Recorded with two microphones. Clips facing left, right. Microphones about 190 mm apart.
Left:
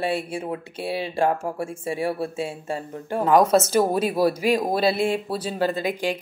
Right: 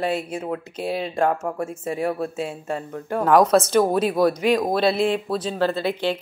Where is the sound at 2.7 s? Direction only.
30° left (ahead or behind).